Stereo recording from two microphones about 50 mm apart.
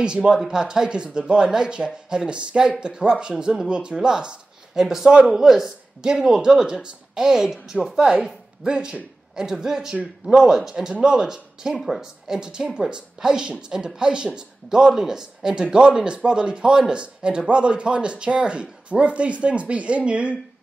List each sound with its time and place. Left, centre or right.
0.0 s speech: centre